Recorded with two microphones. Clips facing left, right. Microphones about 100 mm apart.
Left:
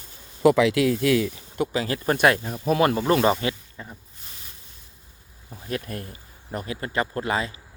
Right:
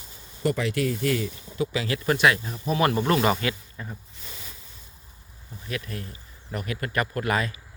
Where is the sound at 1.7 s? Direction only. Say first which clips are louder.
Left 1 dB; 35° left (ahead or behind).